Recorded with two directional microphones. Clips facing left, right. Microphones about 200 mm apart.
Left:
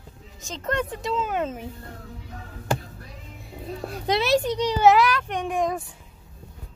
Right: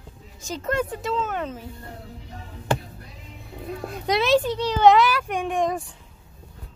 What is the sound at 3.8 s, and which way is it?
Music, 35° left (ahead or behind).